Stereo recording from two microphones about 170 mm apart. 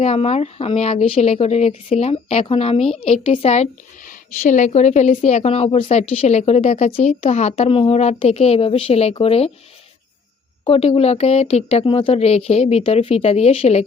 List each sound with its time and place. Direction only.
0.0 s a woman's voice: 35° left (ahead or behind)
10.6 s a woman's voice: 35° left (ahead or behind)